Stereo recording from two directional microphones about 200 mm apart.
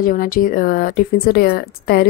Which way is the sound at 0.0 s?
45° left (ahead or behind).